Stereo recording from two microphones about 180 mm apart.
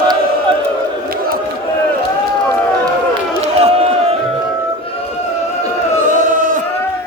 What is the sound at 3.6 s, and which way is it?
Crowd, 35° right (ahead or behind).